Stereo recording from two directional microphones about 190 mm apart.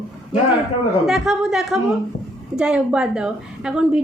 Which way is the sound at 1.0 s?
Centre (ahead or behind).